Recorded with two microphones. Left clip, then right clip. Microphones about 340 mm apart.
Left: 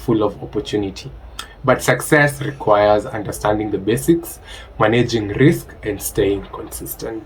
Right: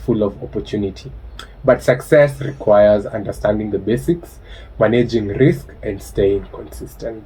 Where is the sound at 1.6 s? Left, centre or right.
Left.